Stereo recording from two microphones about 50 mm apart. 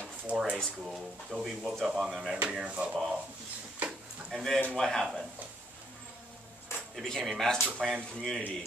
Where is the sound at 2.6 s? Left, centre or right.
Right.